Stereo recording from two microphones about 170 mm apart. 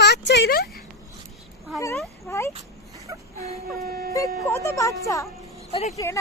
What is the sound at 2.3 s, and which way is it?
Speech, 15° left (ahead or behind).